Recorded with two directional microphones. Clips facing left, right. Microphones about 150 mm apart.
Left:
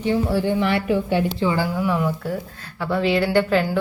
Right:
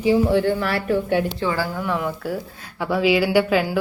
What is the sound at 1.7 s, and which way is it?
Speech, 5° left (ahead or behind).